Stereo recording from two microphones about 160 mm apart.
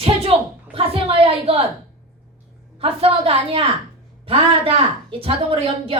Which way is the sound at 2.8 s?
35° right (ahead or behind).